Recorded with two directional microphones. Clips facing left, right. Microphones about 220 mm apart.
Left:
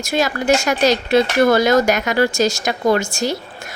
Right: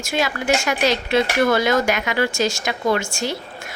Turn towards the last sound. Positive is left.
turn(degrees=40)  # may be behind; listen again after turning